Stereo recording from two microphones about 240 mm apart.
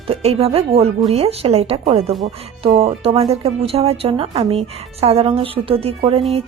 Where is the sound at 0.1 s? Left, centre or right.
Right.